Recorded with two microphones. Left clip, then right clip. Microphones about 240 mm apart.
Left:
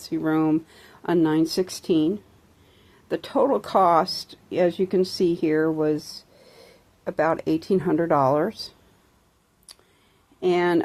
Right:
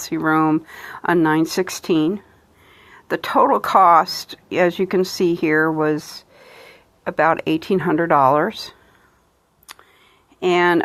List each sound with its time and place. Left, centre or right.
0.0 s speech: centre
6.0 s speech: right
6.7 s a sound: centre
7.7 s speech: centre
10.4 s speech: centre